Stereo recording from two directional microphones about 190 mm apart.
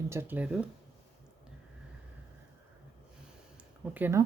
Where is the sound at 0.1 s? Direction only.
10° right (ahead or behind).